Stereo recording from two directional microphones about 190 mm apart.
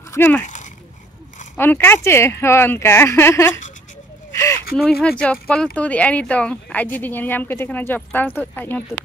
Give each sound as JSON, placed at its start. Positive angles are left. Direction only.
{"t": 0.1, "sound": "speech", "side_deg": 10}
{"t": 0.4, "sound": "a sound", "side_deg": 40}
{"t": 1.6, "sound": "speech", "side_deg": 10}
{"t": 5.0, "sound": "speech", "side_deg": 5}